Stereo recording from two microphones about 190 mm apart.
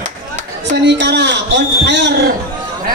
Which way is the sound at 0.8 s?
65° right (ahead or behind).